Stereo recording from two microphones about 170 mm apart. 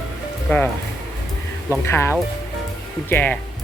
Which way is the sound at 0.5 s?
10° left (ahead or behind).